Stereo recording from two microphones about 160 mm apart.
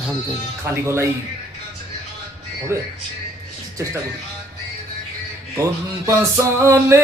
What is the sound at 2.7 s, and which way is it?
Speech, 15° right (ahead or behind).